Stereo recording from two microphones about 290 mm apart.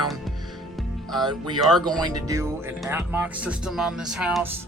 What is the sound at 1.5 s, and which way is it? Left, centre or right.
Speech, centre.